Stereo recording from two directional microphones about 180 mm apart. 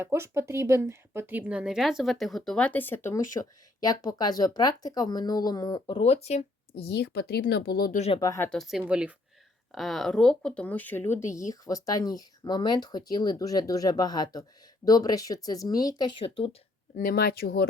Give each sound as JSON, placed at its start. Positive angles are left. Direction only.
{"t": 0.0, "sound": "speech", "side_deg": -15}
{"t": 6.7, "sound": "speech", "side_deg": 65}
{"t": 7.9, "sound": "speech", "side_deg": 35}
{"t": 8.2, "sound": "speech", "side_deg": 20}
{"t": 8.4, "sound": "speech", "side_deg": 0}
{"t": 16.9, "sound": "speech", "side_deg": 55}